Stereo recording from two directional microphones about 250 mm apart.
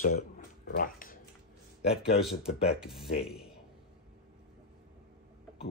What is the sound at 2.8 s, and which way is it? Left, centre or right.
Speech, centre.